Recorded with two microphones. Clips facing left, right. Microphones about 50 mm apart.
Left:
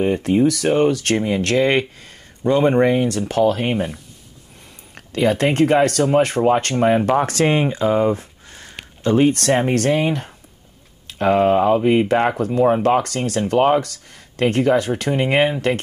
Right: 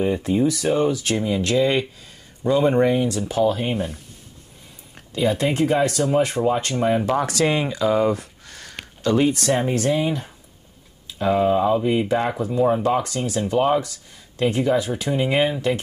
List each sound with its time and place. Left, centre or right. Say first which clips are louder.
0.0 s speech: left 3 dB; left
4.9 s speech: left 3 dB; left
7.0 s speech: left 3 dB; left
9.3 s speech: left 3 dB; left